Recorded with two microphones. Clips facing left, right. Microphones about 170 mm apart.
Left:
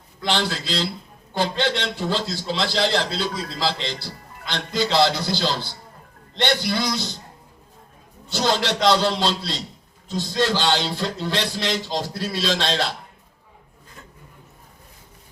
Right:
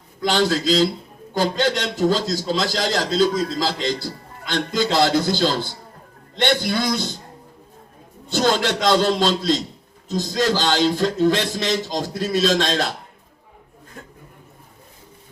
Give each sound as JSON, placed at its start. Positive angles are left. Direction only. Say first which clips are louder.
{"t": 0.2, "sound": "a man's voice", "louder": "right 5 dB", "side_deg": -40}
{"t": 8.3, "sound": "a man's voice", "louder": "right 3 dB", "side_deg": -50}